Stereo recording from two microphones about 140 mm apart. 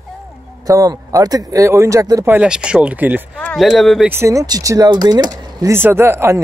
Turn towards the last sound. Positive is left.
turn(degrees=-20)  # may be behind; listen again after turning